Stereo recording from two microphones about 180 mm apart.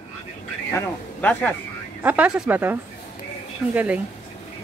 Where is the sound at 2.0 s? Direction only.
5° right (ahead or behind).